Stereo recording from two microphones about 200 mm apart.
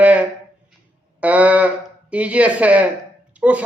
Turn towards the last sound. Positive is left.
turn(degrees=-5)  # may be behind; listen again after turning